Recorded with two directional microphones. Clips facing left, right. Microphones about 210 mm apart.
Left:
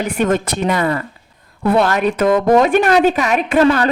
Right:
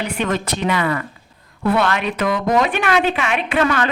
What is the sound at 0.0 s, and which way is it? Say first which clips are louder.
A woman's voice: left 5 dB; 45° left (ahead or behind).